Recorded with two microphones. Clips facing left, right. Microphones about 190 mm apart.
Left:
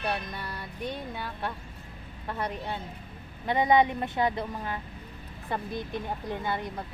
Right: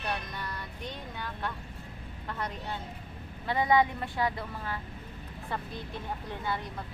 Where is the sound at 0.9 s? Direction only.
10° left (ahead or behind).